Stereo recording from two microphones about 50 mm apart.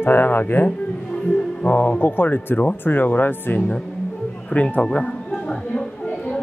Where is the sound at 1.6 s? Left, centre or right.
Left.